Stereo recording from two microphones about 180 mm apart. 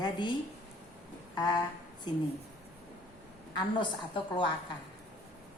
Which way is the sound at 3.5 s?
25° left (ahead or behind).